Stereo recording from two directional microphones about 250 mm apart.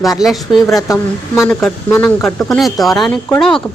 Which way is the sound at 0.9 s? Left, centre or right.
Centre.